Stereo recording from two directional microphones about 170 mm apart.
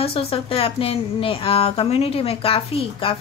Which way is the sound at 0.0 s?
35° left (ahead or behind).